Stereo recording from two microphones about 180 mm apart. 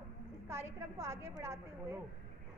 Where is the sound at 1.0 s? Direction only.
15° right (ahead or behind).